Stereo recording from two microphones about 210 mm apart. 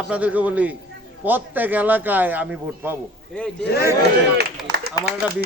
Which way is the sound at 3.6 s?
50° left (ahead or behind).